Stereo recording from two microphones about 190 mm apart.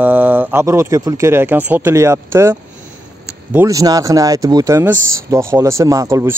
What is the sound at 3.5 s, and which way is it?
Speech, 15° right (ahead or behind).